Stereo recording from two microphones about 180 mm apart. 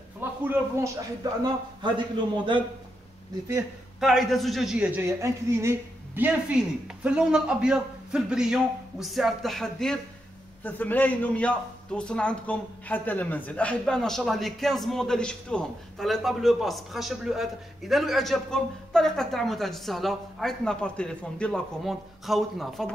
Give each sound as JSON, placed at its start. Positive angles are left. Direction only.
{"t": 0.2, "sound": "a man's voice", "side_deg": -10}
{"t": 4.0, "sound": "a man's voice", "side_deg": 0}